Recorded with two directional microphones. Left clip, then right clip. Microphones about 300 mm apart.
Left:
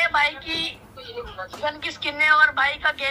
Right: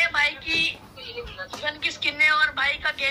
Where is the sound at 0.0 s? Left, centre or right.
Centre.